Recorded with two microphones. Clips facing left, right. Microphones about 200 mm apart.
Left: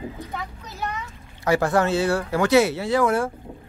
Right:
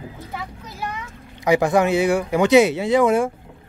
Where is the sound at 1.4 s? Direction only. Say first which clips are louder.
Right 3 dB; 15° right (ahead or behind).